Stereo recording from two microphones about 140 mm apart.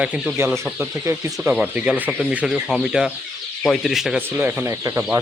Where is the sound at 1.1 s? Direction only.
20° right (ahead or behind).